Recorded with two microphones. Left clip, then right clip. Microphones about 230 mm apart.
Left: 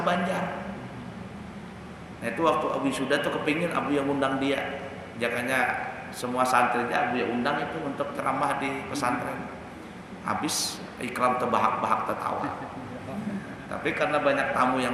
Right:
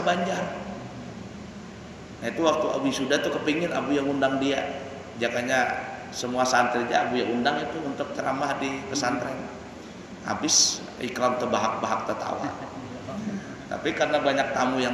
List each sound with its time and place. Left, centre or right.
0.0 s a man's voice: centre
2.2 s a man's voice: centre
10.2 s a man's voice: centre
13.8 s a man's voice: centre